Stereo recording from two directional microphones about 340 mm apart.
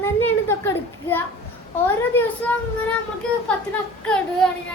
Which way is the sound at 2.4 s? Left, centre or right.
Centre.